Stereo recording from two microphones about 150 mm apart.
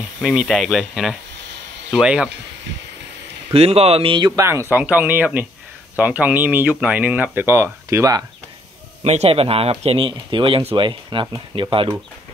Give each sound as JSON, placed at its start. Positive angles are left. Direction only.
{"t": 0.2, "sound": "speech", "side_deg": 0}
{"t": 3.5, "sound": "speech", "side_deg": -45}
{"t": 4.4, "sound": "speech", "side_deg": -15}
{"t": 9.0, "sound": "speech", "side_deg": -45}